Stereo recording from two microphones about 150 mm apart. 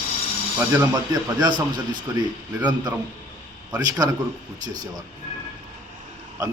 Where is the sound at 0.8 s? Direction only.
25° right (ahead or behind).